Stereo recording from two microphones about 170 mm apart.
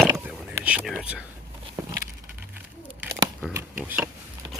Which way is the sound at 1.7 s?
20° right (ahead or behind).